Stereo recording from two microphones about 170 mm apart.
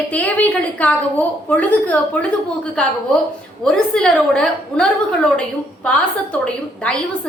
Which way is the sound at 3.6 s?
5° left (ahead or behind).